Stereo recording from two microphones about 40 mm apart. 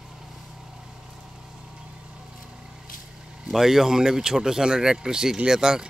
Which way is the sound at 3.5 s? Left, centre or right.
Centre.